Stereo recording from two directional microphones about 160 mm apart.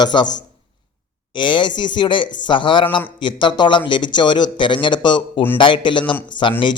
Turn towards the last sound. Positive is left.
turn(degrees=30)  # may be behind; listen again after turning